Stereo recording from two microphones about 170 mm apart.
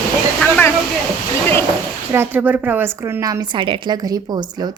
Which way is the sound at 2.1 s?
10° right (ahead or behind).